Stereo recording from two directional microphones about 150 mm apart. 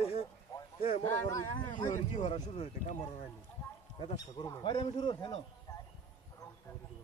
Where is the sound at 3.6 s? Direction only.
25° left (ahead or behind).